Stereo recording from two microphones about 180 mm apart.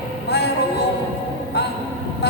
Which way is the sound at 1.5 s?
70° left (ahead or behind).